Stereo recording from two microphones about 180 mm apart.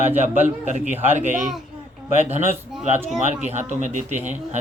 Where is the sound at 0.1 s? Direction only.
10° right (ahead or behind).